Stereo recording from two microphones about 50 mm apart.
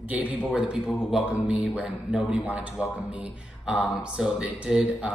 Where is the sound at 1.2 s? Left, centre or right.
Right.